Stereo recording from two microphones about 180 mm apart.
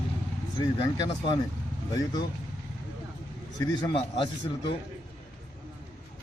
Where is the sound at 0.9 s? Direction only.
20° left (ahead or behind).